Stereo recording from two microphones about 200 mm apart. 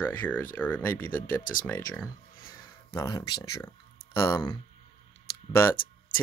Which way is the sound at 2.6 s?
20° left (ahead or behind).